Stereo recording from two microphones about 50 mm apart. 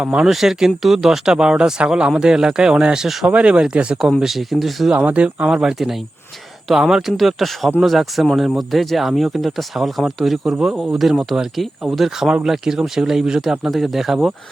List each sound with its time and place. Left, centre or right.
0.0 s speech: centre
0.3 s speech: centre
4.2 s speech: centre
4.9 s speech: right; by 14.3 s centre